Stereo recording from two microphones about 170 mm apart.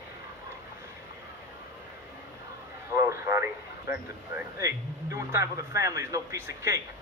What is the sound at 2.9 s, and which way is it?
Speech, 15° right (ahead or behind).